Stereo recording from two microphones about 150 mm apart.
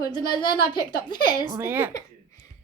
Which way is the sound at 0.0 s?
30° left (ahead or behind).